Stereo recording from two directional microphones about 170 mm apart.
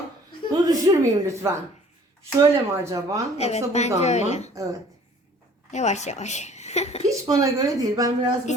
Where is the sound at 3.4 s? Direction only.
40° left (ahead or behind).